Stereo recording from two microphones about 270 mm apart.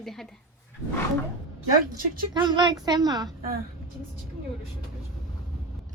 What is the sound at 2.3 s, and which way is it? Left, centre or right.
Speech, centre.